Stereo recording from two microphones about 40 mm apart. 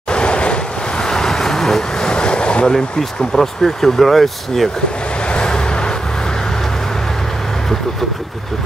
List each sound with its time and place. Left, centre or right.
0.1 s waves: left
1.0 s vehicle: centre
2.7 s speech: centre
5.3 s vehicle: left